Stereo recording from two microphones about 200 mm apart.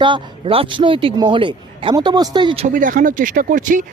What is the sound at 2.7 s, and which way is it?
Speech, 40° right (ahead or behind).